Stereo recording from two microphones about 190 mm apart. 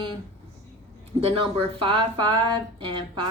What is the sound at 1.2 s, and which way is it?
Speech, 30° right (ahead or behind).